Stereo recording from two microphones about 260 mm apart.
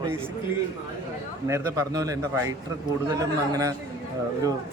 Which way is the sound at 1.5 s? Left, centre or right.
Centre.